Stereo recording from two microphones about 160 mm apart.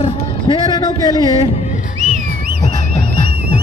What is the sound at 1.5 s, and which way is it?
Music, 45° left (ahead or behind).